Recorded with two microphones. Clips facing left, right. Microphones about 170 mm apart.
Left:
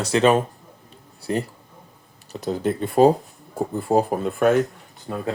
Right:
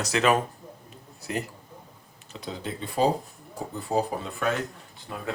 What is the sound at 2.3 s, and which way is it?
Speech, 45° left (ahead or behind).